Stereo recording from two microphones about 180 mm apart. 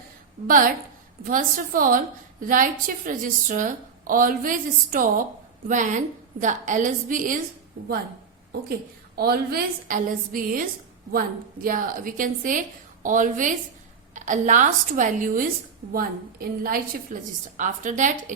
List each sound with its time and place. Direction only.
0.4 s a woman's voice: 50° right (ahead or behind)
9.1 s a woman's voice: 60° right (ahead or behind); by 18.1 s 45° right (ahead or behind)